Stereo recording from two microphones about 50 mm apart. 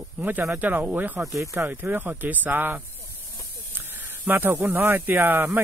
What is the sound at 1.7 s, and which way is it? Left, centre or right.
Speech, right.